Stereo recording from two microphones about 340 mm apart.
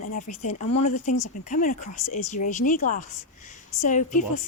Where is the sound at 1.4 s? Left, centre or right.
Left.